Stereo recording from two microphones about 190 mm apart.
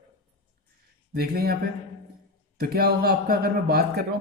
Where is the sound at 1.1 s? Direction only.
55° right (ahead or behind).